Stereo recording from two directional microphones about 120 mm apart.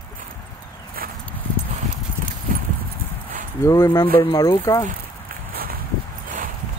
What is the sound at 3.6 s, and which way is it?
Speech, 25° left (ahead or behind).